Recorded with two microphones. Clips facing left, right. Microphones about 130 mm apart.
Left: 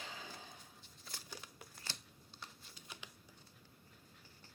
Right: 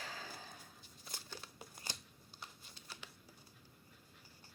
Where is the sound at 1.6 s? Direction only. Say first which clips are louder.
Right 2 dB; 15° right (ahead or behind).